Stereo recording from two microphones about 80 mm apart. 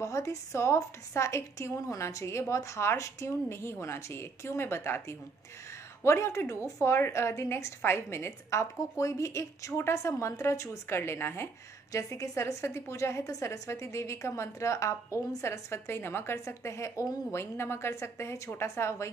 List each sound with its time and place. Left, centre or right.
0.0 s a woman's voice: left
11.9 s a woman's voice: left